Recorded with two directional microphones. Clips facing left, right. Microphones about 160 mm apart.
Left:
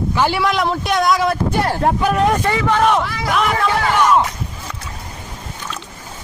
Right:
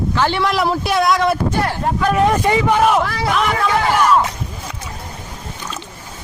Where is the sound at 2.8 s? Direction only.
5° right (ahead or behind).